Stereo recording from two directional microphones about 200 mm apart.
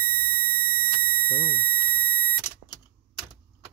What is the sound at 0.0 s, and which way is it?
Smoke detector, 25° right (ahead or behind).